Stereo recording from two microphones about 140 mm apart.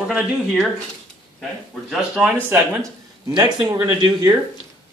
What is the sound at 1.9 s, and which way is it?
Speech, 5° right (ahead or behind).